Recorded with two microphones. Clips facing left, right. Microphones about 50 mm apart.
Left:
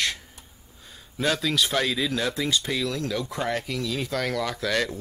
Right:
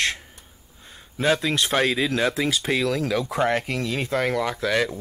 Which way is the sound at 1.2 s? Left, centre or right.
Right.